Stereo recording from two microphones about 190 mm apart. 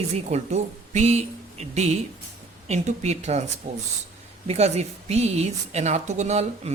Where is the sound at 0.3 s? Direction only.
35° right (ahead or behind).